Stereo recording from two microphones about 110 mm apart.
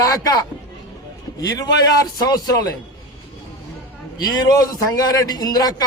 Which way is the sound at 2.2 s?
35° left (ahead or behind).